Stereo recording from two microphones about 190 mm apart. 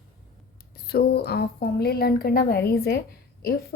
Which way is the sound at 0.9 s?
55° left (ahead or behind).